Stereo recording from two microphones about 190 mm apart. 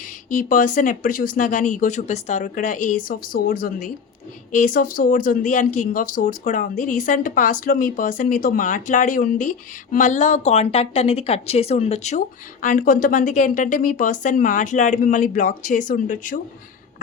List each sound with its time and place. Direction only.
0.0 s speech: 45° left (ahead or behind)